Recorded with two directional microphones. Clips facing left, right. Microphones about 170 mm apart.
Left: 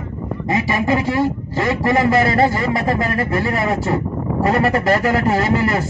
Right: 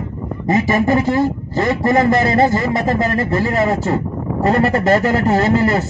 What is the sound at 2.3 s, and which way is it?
Speech, 25° right (ahead or behind).